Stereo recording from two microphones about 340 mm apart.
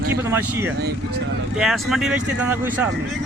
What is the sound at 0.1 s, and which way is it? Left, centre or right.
Speech, centre.